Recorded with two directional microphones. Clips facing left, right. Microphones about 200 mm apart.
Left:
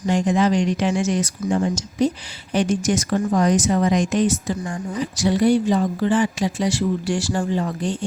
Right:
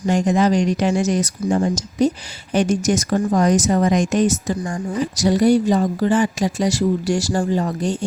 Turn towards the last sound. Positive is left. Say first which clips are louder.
# right 3 dB
turn(degrees=-40)  # may be behind; listen again after turning